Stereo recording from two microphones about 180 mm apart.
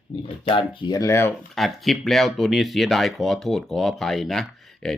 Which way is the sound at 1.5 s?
Centre (ahead or behind).